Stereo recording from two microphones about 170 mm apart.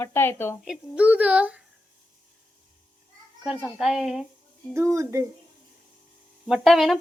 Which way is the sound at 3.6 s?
Centre (ahead or behind).